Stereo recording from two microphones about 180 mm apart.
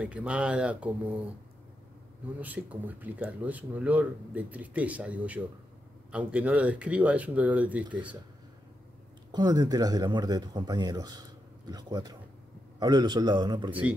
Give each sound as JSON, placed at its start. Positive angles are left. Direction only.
{"t": 0.0, "sound": "speech", "side_deg": -5}
{"t": 2.2, "sound": "speech", "side_deg": -10}
{"t": 9.3, "sound": "speech", "side_deg": -25}